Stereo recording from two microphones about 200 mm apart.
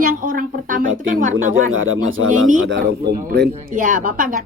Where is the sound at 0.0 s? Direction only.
45° right (ahead or behind).